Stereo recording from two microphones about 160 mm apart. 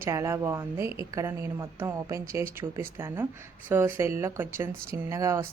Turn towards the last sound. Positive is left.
turn(degrees=-20)  # may be behind; listen again after turning